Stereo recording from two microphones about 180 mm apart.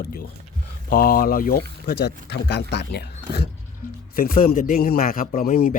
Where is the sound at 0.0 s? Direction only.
55° left (ahead or behind).